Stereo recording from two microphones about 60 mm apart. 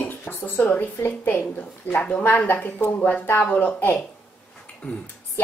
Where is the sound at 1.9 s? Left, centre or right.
Left.